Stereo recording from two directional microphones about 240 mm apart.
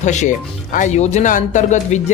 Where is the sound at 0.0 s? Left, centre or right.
Left.